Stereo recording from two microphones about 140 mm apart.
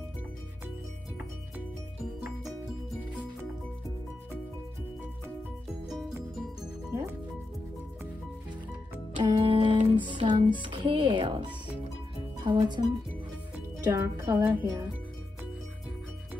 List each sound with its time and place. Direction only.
5.9 s music: centre (ahead or behind)
6.9 s music: 25° right (ahead or behind)
9.1 s music: 35° right (ahead or behind)
10.6 s speech: 40° right (ahead or behind)
13.8 s speech: 20° right (ahead or behind)